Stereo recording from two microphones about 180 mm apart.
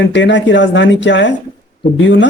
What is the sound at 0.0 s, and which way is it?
Speech, 80° left.